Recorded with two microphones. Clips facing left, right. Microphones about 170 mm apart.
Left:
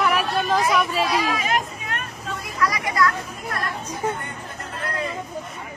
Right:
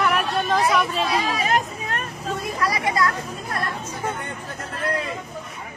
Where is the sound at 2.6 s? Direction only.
25° right (ahead or behind).